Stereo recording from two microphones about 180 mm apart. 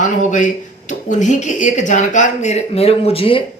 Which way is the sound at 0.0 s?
45° left (ahead or behind).